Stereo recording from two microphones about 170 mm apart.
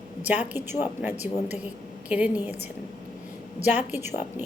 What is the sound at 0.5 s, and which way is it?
Speech, 15° right (ahead or behind).